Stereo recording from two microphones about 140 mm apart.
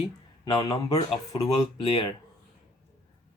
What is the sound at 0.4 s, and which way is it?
Speech, 30° left (ahead or behind).